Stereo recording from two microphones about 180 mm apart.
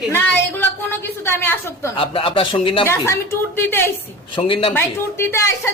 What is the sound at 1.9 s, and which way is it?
Speech, 30° left (ahead or behind).